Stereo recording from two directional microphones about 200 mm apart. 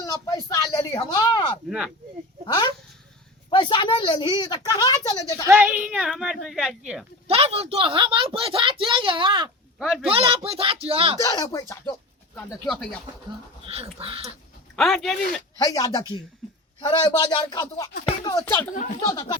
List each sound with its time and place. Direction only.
0.0 s speech: 20° left (ahead or behind)
5.5 s speech: 10° right (ahead or behind)
7.3 s a woman's voice: 30° right (ahead or behind)
9.7 s speech: centre (ahead or behind)
10.1 s a woman's voice: 30° right (ahead or behind)
11.2 s speech: 15° left (ahead or behind)
12.4 s speech: 5° left (ahead or behind)
13.7 s a woman's voice: 30° right (ahead or behind)
14.8 s speech: centre (ahead or behind)
15.5 s speech: 20° left (ahead or behind)